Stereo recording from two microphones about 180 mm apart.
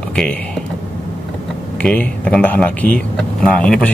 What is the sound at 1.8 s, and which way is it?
Speech, 5° left (ahead or behind).